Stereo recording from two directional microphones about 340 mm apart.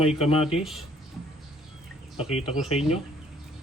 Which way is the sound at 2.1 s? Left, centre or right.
Centre.